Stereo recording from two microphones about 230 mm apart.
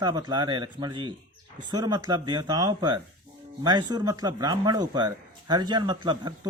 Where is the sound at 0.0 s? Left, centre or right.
Centre.